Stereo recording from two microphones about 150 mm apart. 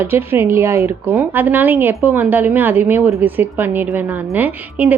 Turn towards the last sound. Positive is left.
turn(degrees=-10)  # may be behind; listen again after turning